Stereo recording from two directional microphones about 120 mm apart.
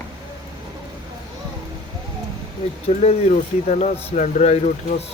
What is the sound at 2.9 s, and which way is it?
Speech, 70° left (ahead or behind).